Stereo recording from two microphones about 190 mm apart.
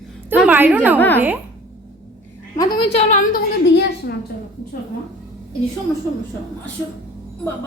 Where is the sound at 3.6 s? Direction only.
60° left (ahead or behind).